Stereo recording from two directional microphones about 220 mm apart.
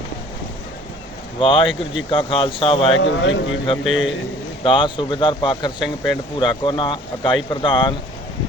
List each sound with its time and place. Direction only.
1.4 s speech: 25° left (ahead or behind)
3.0 s a man's voice: 55° left (ahead or behind)
3.8 s a man's voice: 5° right (ahead or behind)
4.6 s speech: 20° left (ahead or behind)